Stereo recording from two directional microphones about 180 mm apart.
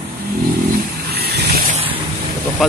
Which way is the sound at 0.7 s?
60° right (ahead or behind).